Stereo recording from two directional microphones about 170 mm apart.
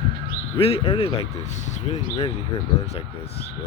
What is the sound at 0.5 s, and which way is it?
Speech, 35° left (ahead or behind).